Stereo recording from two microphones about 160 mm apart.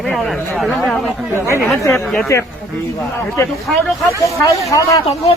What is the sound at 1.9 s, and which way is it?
Speech, centre (ahead or behind).